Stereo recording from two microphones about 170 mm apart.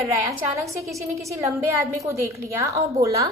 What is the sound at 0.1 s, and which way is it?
A woman's voice, 20° right (ahead or behind).